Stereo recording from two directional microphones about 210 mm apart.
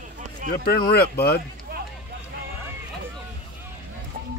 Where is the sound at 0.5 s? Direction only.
45° left (ahead or behind).